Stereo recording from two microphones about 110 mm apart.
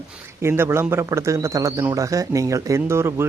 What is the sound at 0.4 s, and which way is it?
Speech, 20° right (ahead or behind).